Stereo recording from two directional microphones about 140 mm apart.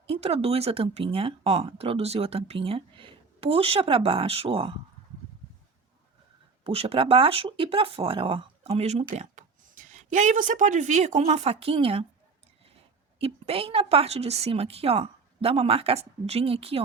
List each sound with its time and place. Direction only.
0.1 s speech: 45° right (ahead or behind)
6.7 s speech: 45° right (ahead or behind)
9.1 s speech: 65° right (ahead or behind); by 12.0 s 40° right (ahead or behind)
13.1 s speech: 45° right (ahead or behind)